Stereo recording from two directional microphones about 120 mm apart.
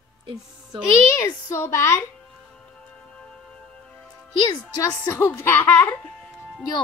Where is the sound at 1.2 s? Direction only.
20° left (ahead or behind).